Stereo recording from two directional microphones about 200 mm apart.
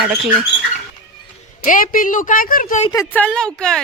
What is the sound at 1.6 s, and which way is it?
A woman's voice, 45° left (ahead or behind).